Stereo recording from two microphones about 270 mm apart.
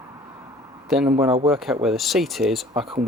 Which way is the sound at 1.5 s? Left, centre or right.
Centre.